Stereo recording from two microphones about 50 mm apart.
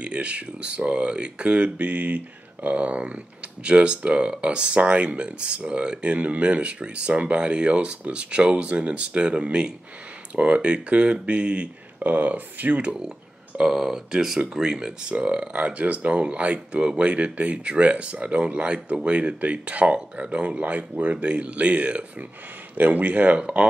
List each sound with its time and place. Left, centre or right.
0.0 s speech: right
12.0 s speech: right
13.6 s speech: centre
22.8 s speech: right